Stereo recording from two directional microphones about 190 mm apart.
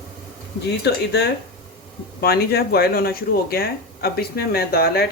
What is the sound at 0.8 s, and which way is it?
Speech, 60° left (ahead or behind).